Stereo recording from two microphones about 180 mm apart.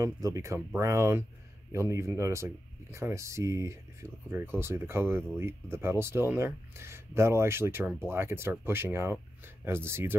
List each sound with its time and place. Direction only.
0.0 s speech: 15° right (ahead or behind)